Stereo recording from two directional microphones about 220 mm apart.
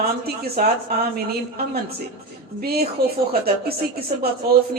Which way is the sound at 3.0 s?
45° right (ahead or behind).